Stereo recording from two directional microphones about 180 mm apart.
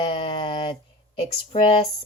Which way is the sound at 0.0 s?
30° left (ahead or behind).